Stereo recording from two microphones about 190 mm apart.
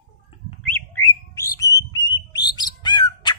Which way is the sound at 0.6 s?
10° left (ahead or behind).